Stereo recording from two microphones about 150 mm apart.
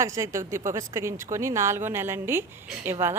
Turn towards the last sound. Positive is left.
turn(degrees=-15)  # may be behind; listen again after turning